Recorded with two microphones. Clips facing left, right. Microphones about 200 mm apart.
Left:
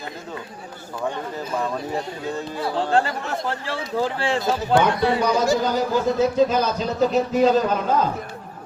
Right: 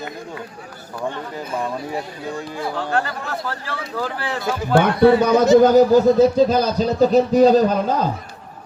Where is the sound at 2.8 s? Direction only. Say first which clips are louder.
Left 3 dB; 25° left (ahead or behind).